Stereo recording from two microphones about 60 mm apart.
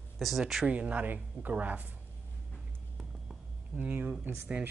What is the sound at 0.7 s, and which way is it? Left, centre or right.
Speech, right.